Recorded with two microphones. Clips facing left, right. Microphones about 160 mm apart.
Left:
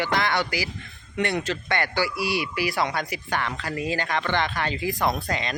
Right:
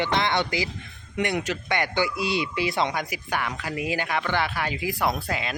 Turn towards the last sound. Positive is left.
turn(degrees=-5)  # may be behind; listen again after turning